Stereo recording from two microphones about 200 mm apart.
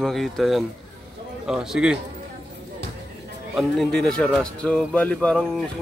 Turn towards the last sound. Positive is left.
turn(degrees=5)  # may be behind; listen again after turning